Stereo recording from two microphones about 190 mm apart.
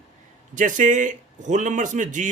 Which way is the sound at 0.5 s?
40° right (ahead or behind).